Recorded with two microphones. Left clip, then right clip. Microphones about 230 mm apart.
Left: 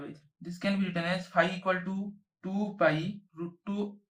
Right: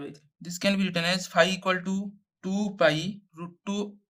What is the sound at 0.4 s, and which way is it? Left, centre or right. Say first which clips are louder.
Speech: right 6 dB; right.